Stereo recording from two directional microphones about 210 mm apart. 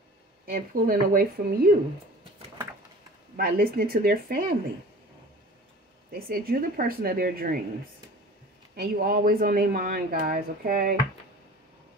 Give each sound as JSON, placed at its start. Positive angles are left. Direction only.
{"t": 0.5, "sound": "speech", "side_deg": -45}
{"t": 3.3, "sound": "speech", "side_deg": -45}
{"t": 6.1, "sound": "speech", "side_deg": -45}
{"t": 8.7, "sound": "speech", "side_deg": -45}